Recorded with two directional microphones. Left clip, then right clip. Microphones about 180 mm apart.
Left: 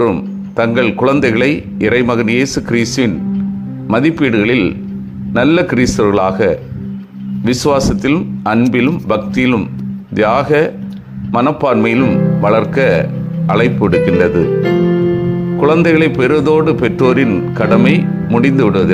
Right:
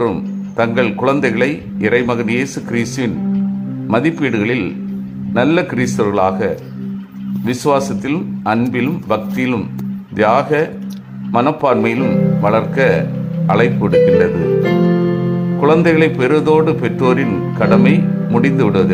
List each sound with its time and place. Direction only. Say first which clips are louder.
0.5 s a man's voice: left 2 dB; 20° left (ahead or behind)
14.6 s keyboard: left 2 dB; 10° right (ahead or behind)
15.6 s a man's voice: left 1 dB; 20° left (ahead or behind)